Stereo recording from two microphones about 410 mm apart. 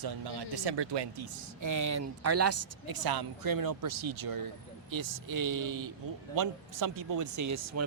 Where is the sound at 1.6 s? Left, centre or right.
Right.